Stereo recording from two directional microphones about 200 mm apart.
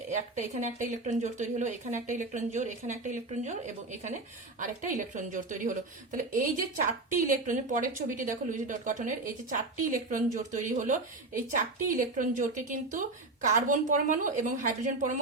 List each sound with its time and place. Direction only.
0.1 s a woman's voice: 35° right (ahead or behind)
4.6 s a woman's voice: 40° right (ahead or behind)